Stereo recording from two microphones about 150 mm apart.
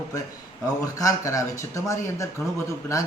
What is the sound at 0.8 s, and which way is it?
A man's voice, 25° left (ahead or behind).